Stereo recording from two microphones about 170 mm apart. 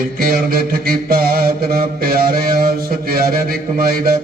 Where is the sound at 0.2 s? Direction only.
60° right (ahead or behind).